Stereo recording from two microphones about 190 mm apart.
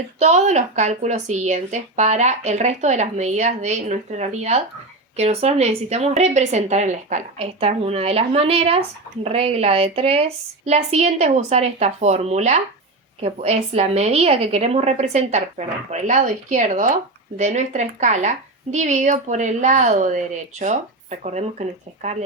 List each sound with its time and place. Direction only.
0.2 s a woman's voice: 35° right (ahead or behind)